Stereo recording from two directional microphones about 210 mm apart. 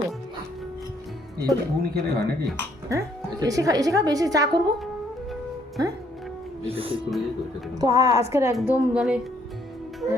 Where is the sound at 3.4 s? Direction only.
15° right (ahead or behind).